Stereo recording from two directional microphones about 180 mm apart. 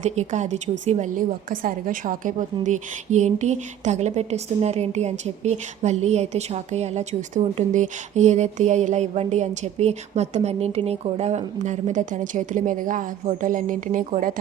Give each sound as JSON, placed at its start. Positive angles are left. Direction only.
{"t": 0.0, "sound": "a woman's voice", "side_deg": -40}